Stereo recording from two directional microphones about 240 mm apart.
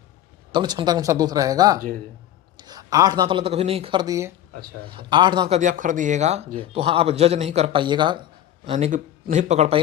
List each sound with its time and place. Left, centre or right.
0.5 s a man's voice: centre
5.5 s a man's voice: right